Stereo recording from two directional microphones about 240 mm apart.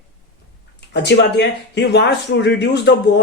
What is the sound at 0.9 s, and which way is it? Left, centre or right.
Speech, left.